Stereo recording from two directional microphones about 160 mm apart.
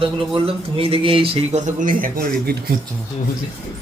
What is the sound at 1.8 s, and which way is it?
Speech, 60° right (ahead or behind).